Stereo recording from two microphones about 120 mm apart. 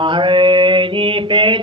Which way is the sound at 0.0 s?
45° right (ahead or behind).